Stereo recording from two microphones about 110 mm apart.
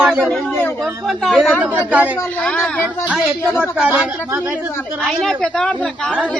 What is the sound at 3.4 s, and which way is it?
Speech, 20° left (ahead or behind).